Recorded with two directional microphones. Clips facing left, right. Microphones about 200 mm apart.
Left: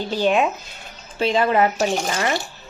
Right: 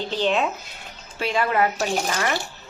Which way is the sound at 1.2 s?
25° left (ahead or behind).